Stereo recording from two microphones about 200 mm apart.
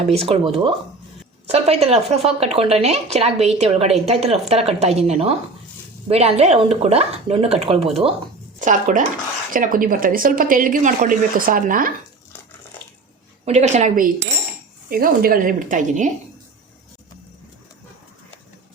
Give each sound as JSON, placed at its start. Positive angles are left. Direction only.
{"t": 0.1, "sound": "a woman's voice", "side_deg": -30}
{"t": 13.4, "sound": "a woman's voice", "side_deg": -35}